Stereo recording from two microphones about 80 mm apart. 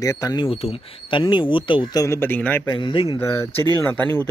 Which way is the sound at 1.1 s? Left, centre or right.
Left.